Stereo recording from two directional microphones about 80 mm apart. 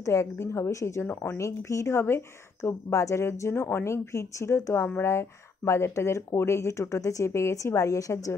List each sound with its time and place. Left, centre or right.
0.0 s speech: left